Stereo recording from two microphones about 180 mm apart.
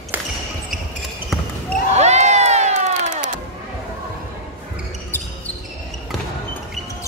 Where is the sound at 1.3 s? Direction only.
Centre (ahead or behind).